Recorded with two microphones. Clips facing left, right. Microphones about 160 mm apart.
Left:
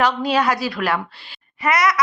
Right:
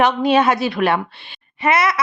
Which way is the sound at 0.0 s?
25° right (ahead or behind).